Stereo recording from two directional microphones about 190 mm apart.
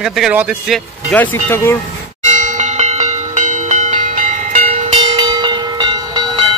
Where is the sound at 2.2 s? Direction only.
40° right (ahead or behind).